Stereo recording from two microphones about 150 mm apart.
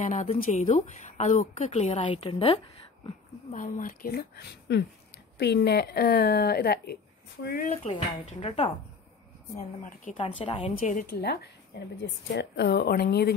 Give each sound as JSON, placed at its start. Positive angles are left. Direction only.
{"t": 0.0, "sound": "a woman's voice", "side_deg": 55}
{"t": 3.5, "sound": "a woman's voice", "side_deg": 60}
{"t": 7.7, "sound": "a woman's voice", "side_deg": 45}
{"t": 10.1, "sound": "a woman's voice", "side_deg": 40}
{"t": 10.8, "sound": "a woman's voice", "side_deg": 65}
{"t": 12.6, "sound": "a woman's voice", "side_deg": 90}